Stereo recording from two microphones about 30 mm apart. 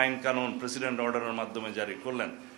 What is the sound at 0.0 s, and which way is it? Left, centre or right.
A man's voice, centre.